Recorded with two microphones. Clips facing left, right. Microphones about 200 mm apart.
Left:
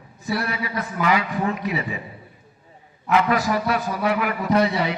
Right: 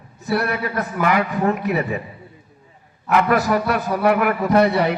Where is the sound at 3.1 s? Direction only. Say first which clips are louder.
Right 3 dB; 50° right (ahead or behind).